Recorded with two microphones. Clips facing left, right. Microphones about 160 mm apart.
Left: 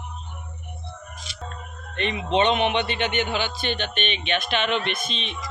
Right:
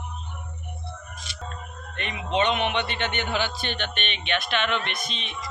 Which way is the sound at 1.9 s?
25° left (ahead or behind).